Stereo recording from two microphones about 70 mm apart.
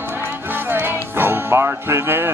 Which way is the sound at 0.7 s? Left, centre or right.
Right.